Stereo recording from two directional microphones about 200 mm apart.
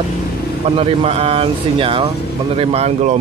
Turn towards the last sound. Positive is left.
turn(degrees=-35)  # may be behind; listen again after turning